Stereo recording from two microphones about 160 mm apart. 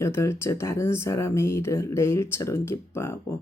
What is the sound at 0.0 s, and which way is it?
Speech, 15° left (ahead or behind).